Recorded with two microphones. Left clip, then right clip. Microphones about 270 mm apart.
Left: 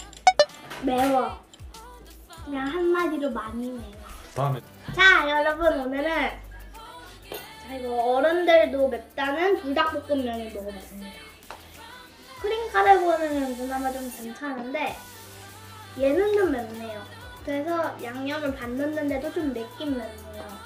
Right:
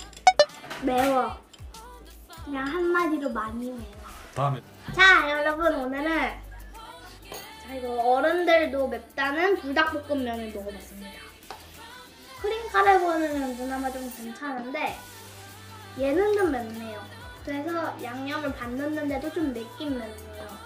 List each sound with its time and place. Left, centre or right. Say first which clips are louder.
0.2 s music: even; centre
2.4 s a woman's voice: left 1 dB; centre
16.0 s a woman's voice: left 2 dB; centre